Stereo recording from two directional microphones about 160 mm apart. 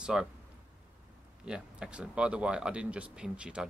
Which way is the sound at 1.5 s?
5° right (ahead or behind).